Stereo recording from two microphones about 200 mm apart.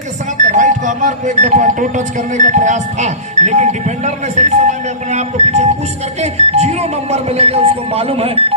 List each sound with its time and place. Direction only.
0.4 s speech: 40° right (ahead or behind)